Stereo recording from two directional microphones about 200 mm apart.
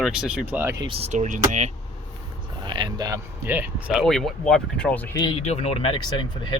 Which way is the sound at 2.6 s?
20° right (ahead or behind).